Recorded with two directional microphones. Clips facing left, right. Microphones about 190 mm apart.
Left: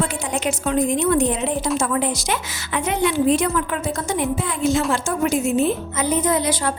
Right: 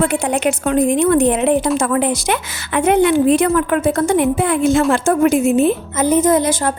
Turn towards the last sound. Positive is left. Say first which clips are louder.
# right 6 dB
turn(degrees=-50)  # may be behind; listen again after turning